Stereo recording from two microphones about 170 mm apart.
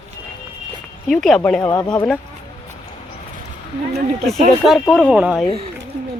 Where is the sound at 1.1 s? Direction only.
Centre (ahead or behind).